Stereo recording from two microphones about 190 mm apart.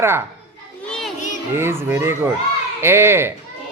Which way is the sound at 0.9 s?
Centre (ahead or behind).